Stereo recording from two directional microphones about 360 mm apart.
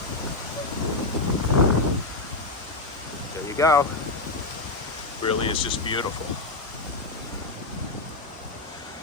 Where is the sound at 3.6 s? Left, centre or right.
Centre.